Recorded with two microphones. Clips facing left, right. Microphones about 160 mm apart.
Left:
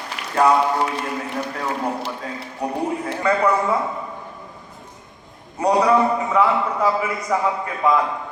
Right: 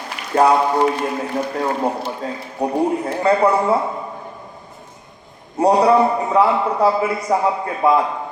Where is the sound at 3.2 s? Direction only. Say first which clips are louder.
Right 3 dB; 30° right (ahead or behind).